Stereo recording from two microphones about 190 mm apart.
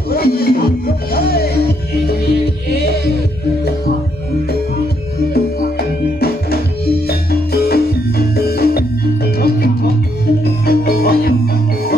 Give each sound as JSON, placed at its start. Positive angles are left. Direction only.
{"t": 0.1, "sound": "music", "side_deg": 55}
{"t": 2.7, "sound": "music", "side_deg": 55}
{"t": 6.1, "sound": "music", "side_deg": 55}